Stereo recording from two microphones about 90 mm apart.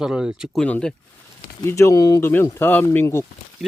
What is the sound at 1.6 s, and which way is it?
Speech, 35° left (ahead or behind).